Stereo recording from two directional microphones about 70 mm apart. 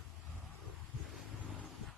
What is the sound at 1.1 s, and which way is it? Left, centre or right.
Wind noise, centre.